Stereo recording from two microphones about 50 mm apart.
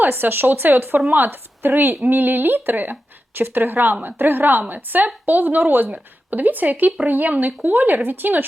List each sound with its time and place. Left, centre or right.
0.0 s a woman's voice: right